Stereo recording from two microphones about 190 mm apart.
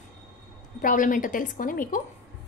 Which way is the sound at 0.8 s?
45° left (ahead or behind).